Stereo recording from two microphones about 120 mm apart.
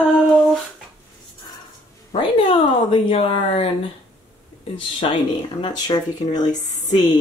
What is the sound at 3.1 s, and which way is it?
Speech, 55° left (ahead or behind).